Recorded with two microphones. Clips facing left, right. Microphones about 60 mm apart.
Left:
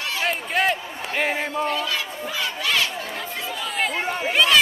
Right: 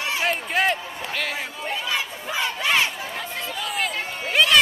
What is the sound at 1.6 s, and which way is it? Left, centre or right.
Crowd, centre.